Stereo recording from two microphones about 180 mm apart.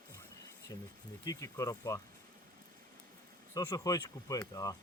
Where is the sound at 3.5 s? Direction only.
20° left (ahead or behind).